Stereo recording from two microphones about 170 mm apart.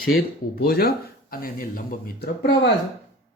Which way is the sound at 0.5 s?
65° left (ahead or behind).